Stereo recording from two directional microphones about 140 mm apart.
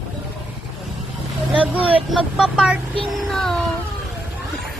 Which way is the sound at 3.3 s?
Centre (ahead or behind).